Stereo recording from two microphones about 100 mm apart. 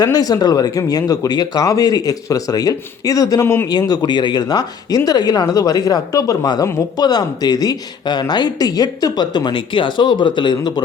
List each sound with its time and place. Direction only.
0.0 s speech: 40° left (ahead or behind)
3.4 s a man's voice: 25° left (ahead or behind)
3.7 s speech: 40° left (ahead or behind)